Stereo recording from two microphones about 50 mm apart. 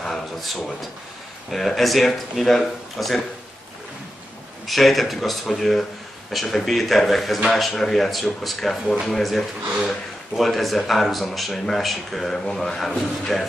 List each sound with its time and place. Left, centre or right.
0.0 s speech: centre
4.6 s speech: centre